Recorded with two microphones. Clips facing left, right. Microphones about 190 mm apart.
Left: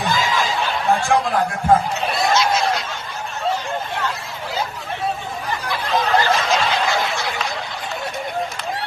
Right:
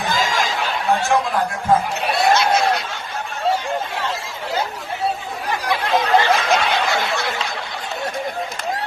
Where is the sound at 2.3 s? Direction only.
60° right (ahead or behind).